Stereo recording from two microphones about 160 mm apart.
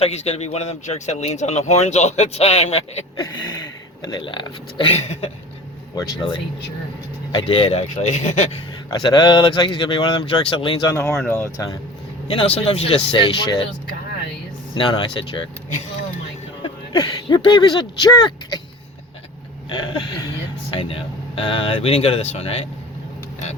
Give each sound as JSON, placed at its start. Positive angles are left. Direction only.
{"t": 0.0, "sound": "speech", "side_deg": 40}
{"t": 4.0, "sound": "speech", "side_deg": 30}
{"t": 5.9, "sound": "speech", "side_deg": 25}
{"t": 8.9, "sound": "speech", "side_deg": 25}
{"t": 11.1, "sound": "speech", "side_deg": 5}
{"t": 11.3, "sound": "speech", "side_deg": 20}
{"t": 12.5, "sound": "speech", "side_deg": 40}
{"t": 14.8, "sound": "speech", "side_deg": 30}
{"t": 16.6, "sound": "speech", "side_deg": 25}
{"t": 19.7, "sound": "speech", "side_deg": 30}